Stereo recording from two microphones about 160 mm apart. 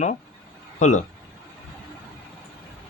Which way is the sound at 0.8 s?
50° left (ahead or behind).